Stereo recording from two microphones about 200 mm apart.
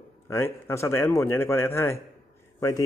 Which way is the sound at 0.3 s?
15° left (ahead or behind).